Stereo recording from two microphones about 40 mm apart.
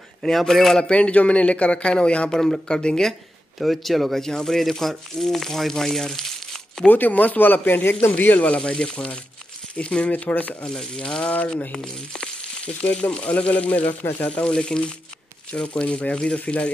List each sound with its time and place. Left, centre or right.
0.2 s speech: centre
0.7 s speech: left
2.3 s speech: centre
3.5 s speech: centre
6.9 s speech: left
8.2 s speech: left
8.6 s speech: left
10.6 s speech: left